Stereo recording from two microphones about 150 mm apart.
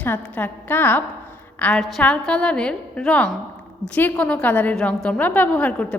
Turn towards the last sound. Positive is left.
turn(degrees=10)  # may be behind; listen again after turning